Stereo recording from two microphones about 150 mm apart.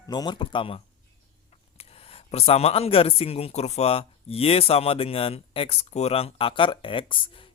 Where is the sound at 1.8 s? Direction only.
40° left (ahead or behind).